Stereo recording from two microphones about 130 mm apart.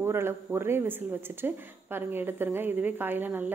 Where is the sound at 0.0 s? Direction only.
20° right (ahead or behind).